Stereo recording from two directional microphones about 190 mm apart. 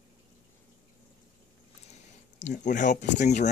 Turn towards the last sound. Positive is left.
turn(degrees=35)  # may be behind; listen again after turning